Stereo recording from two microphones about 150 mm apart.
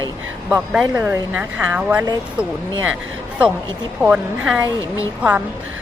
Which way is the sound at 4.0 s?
5° right (ahead or behind).